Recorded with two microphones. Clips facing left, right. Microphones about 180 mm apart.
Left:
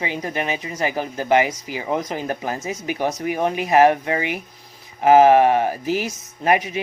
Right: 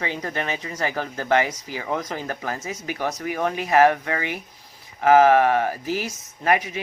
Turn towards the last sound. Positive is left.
turn(degrees=20)  # may be behind; listen again after turning